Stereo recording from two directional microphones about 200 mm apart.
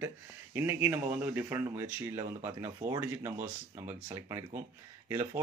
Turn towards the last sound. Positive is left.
turn(degrees=-10)  # may be behind; listen again after turning